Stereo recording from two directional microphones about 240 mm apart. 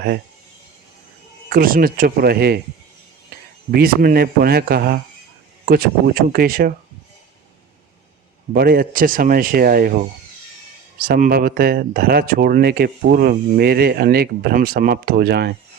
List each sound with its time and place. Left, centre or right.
1.5 s speech: right
3.7 s speech: right
6.2 s speech: right
8.5 s speech: right